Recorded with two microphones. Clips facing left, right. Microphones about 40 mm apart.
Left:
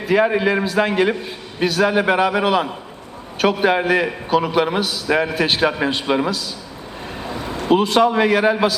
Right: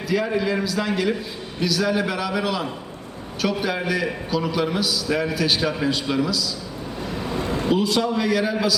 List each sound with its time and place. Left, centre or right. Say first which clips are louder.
0.1 s a man's voice: left 6 dB; left
7.2 s vehicle: right 1 dB; left
7.6 s a man's voice: left 7 dB; left